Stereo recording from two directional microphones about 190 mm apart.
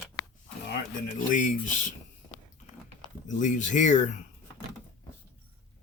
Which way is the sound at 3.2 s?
40° left (ahead or behind).